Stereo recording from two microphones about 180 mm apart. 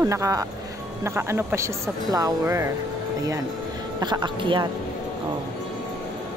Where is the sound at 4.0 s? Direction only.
25° right (ahead or behind).